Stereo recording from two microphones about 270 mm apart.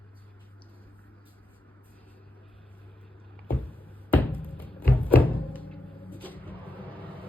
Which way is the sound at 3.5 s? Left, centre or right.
Centre.